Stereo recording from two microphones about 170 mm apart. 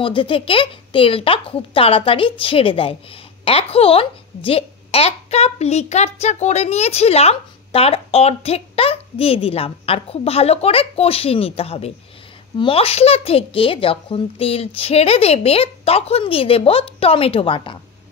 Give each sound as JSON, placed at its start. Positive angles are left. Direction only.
{"t": 0.0, "sound": "speech", "side_deg": 30}